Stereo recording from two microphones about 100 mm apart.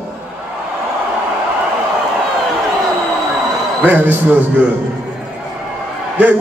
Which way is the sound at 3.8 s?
20° right (ahead or behind).